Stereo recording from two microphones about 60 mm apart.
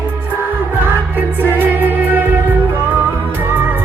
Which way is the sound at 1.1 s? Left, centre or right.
Right.